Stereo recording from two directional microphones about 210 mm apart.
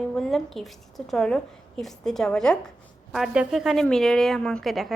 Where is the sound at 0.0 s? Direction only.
5° left (ahead or behind).